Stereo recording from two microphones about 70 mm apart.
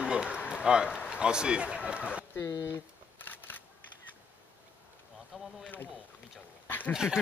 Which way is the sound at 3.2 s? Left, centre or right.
Left.